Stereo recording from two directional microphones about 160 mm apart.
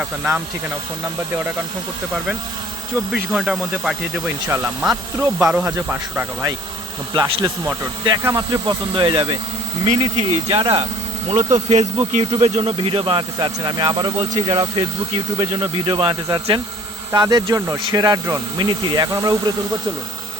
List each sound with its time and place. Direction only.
0.0 s speech: 5° right (ahead or behind)
3.1 s speech: centre (ahead or behind)
4.3 s speech: 10° right (ahead or behind); by 9.4 s 30° right (ahead or behind)
9.8 s speech: 40° right (ahead or behind)
11.3 s speech: 40° right (ahead or behind); by 19.5 s 20° right (ahead or behind)